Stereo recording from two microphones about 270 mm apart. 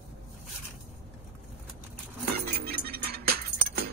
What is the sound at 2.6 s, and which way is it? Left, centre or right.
Music, right.